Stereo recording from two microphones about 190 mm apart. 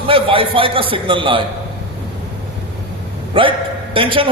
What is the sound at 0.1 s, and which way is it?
A man's voice, 30° right (ahead or behind).